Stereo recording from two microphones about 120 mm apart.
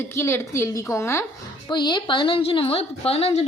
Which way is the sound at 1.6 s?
40° left (ahead or behind).